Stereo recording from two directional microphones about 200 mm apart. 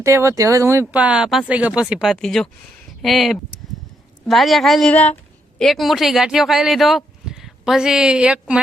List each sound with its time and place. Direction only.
0.0 s speech: 15° right (ahead or behind)